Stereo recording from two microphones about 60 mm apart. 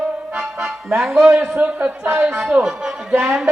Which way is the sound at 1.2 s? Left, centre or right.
Centre.